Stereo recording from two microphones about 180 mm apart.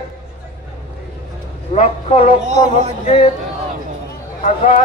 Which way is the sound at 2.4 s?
40° right (ahead or behind).